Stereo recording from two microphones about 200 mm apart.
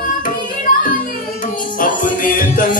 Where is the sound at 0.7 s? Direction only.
45° left (ahead or behind).